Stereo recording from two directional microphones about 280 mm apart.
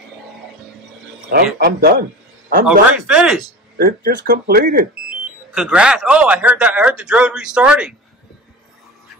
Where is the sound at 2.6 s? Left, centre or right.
Centre.